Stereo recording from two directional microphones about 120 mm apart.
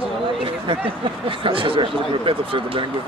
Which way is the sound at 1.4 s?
45° right (ahead or behind).